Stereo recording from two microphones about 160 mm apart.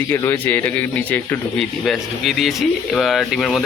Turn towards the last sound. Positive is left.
turn(degrees=0)  # may be behind; listen again after turning